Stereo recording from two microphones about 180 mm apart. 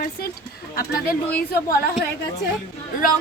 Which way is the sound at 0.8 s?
55° left (ahead or behind).